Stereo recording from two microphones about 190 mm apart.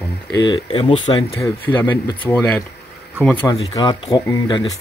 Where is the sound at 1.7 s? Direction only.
10° left (ahead or behind).